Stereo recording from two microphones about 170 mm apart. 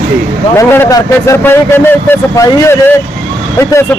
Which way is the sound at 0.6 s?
20° left (ahead or behind).